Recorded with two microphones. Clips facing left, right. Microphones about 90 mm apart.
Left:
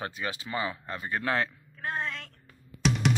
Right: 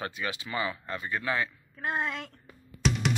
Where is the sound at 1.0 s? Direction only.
55° left (ahead or behind).